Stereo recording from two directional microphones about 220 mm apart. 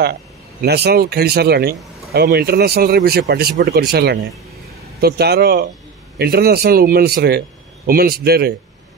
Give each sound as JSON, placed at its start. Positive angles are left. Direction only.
{"t": 0.0, "sound": "a man's voice", "side_deg": -45}